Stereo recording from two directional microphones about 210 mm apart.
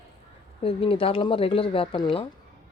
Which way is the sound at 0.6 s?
25° left (ahead or behind).